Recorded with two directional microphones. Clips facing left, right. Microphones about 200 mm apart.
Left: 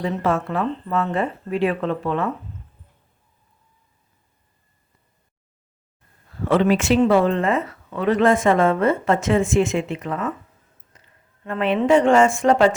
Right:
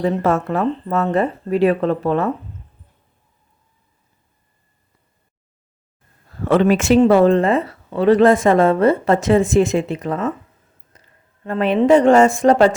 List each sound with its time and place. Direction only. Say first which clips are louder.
0.0 s speech: right 4 dB; 40° right (ahead or behind)
6.5 s speech: right 4 dB; 45° right (ahead or behind)
10.9 s a sound: right 3 dB; 40° right (ahead or behind)
11.4 s speech: right 4 dB; 40° right (ahead or behind)